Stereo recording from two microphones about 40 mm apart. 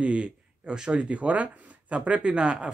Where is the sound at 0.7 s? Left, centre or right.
Right.